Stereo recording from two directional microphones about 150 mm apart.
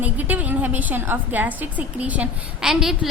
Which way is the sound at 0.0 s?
10° right (ahead or behind).